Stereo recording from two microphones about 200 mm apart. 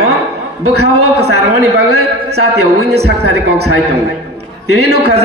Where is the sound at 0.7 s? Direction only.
55° right (ahead or behind).